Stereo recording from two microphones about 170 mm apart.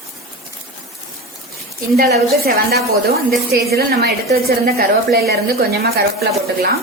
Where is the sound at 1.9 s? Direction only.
70° right (ahead or behind).